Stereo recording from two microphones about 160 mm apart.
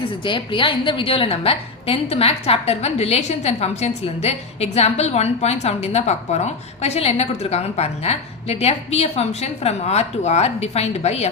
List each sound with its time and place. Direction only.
0.3 s a woman's voice: 30° left (ahead or behind)